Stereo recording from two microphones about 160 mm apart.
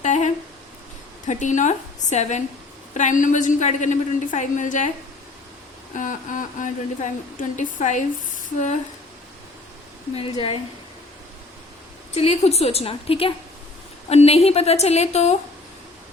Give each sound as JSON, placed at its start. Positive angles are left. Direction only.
{"t": 0.0, "sound": "a sound", "side_deg": 45}
{"t": 1.3, "sound": "a woman's voice", "side_deg": 50}
{"t": 5.9, "sound": "a woman's voice", "side_deg": 55}
{"t": 10.2, "sound": "a woman's voice", "side_deg": 35}
{"t": 12.1, "sound": "a woman's voice", "side_deg": 40}